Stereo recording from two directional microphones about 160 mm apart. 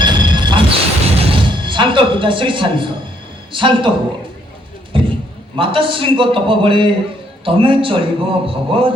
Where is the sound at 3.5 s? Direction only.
30° right (ahead or behind).